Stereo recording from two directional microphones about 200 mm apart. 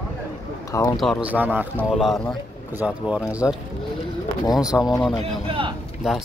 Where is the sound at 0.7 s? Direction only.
15° left (ahead or behind).